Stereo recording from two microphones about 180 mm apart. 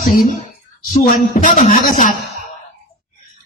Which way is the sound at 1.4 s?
45° left (ahead or behind).